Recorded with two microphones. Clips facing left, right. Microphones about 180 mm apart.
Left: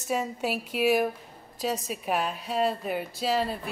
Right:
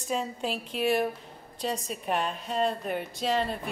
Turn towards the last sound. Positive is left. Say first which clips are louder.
# left 1 dB
turn(degrees=5)  # may be behind; listen again after turning